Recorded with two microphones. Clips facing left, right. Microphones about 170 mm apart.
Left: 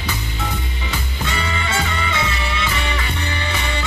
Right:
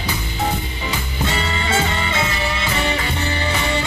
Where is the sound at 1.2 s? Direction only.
30° right (ahead or behind).